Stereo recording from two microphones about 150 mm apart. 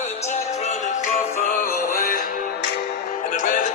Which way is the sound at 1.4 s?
65° left (ahead or behind).